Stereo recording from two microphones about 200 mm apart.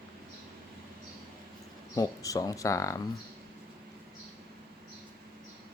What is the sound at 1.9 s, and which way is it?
Speech, 15° left (ahead or behind).